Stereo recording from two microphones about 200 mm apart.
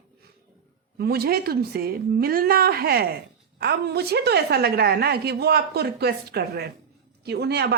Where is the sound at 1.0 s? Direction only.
50° right (ahead or behind).